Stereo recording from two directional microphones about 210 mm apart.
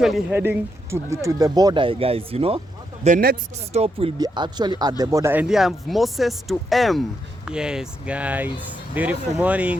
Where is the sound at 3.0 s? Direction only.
40° right (ahead or behind).